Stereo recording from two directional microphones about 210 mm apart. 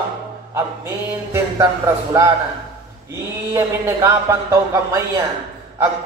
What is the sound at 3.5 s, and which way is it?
Speech, 15° right (ahead or behind).